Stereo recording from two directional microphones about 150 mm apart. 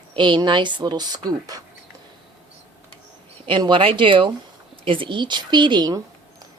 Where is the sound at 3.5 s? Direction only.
30° right (ahead or behind).